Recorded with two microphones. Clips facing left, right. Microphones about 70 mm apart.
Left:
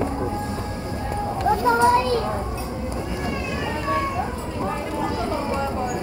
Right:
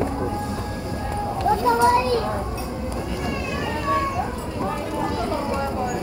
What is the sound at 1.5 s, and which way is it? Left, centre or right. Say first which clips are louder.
Children playing: even; left.